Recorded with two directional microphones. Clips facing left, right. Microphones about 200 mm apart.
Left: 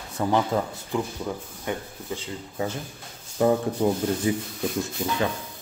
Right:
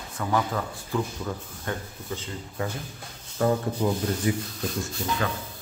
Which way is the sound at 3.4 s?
20° left (ahead or behind).